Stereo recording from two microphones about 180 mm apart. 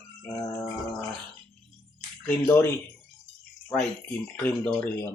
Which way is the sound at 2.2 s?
10° left (ahead or behind).